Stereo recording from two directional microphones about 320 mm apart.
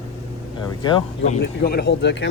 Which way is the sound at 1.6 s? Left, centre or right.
Left.